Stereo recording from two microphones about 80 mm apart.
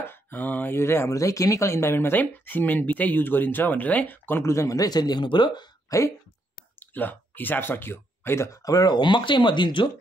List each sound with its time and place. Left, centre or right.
0.0 s speech: left
5.9 s speech: left
6.8 s speech: left
8.6 s speech: left